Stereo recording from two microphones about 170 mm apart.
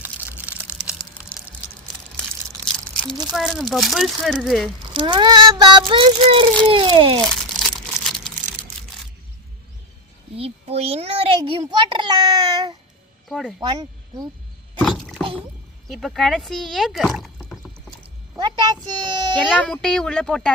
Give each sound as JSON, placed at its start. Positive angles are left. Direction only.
{"t": 0.0, "sound": "crumpling", "side_deg": -10}
{"t": 2.7, "sound": "a sound", "side_deg": 5}
{"t": 3.3, "sound": "speech", "side_deg": 0}
{"t": 4.9, "sound": "speech", "side_deg": -25}
{"t": 7.5, "sound": "crumpling", "side_deg": 0}
{"t": 10.3, "sound": "a sound", "side_deg": -35}
{"t": 13.2, "sound": "speech", "side_deg": 0}
{"t": 13.6, "sound": "speech", "side_deg": -25}
{"t": 14.8, "sound": "a sound", "side_deg": 0}
{"t": 15.9, "sound": "speech", "side_deg": 0}
{"t": 17.2, "sound": "rowboat", "side_deg": 0}
{"t": 18.3, "sound": "speech", "side_deg": -25}
{"t": 19.5, "sound": "speech", "side_deg": 5}